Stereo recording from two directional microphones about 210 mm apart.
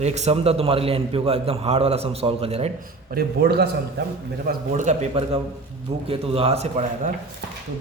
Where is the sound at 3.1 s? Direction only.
50° right (ahead or behind).